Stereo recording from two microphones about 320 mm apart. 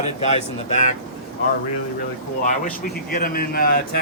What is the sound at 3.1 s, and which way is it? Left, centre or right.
Speech, left.